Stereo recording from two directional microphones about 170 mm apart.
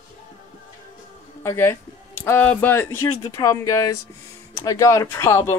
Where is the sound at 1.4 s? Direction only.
15° left (ahead or behind).